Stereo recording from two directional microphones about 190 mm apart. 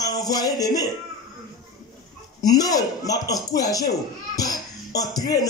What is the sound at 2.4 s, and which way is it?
Music, 20° left (ahead or behind).